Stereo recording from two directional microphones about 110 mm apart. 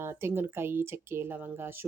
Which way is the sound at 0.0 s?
20° right (ahead or behind).